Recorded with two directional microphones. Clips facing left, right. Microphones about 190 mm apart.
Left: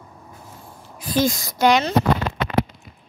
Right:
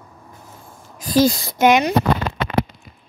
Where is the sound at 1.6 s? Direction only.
20° right (ahead or behind).